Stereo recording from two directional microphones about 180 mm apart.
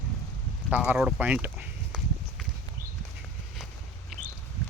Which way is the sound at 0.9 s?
5° right (ahead or behind).